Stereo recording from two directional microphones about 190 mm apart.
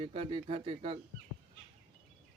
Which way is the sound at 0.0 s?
30° right (ahead or behind).